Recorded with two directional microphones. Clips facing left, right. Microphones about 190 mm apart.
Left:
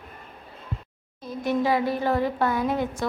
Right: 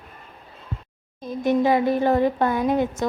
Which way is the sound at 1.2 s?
20° right (ahead or behind).